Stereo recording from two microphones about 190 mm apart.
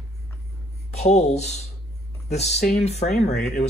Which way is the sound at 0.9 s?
35° left (ahead or behind).